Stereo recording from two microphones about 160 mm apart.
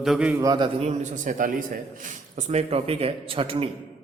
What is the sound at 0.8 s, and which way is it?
A man's voice, 45° right (ahead or behind).